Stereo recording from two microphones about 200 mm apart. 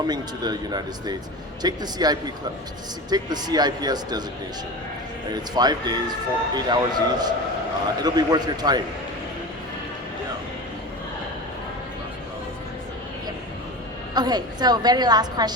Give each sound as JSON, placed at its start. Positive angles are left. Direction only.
{"t": 0.1, "sound": "speech", "side_deg": -20}
{"t": 5.3, "sound": "speech", "side_deg": -20}
{"t": 14.1, "sound": "speech", "side_deg": -20}